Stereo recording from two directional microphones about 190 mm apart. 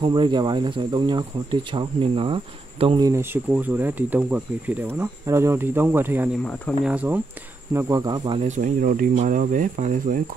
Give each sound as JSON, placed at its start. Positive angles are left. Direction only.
{"t": 0.0, "sound": "speech", "side_deg": -25}
{"t": 3.1, "sound": "speech", "side_deg": -10}
{"t": 7.7, "sound": "speech", "side_deg": -20}
{"t": 8.4, "sound": "speech", "side_deg": -40}